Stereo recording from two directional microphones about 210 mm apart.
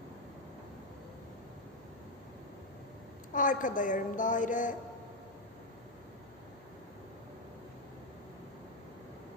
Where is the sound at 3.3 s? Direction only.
40° left (ahead or behind).